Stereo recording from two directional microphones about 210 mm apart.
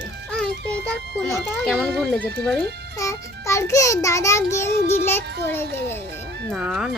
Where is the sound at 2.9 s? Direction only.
15° left (ahead or behind).